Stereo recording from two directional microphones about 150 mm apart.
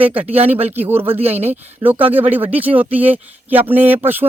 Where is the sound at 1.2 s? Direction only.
45° right (ahead or behind).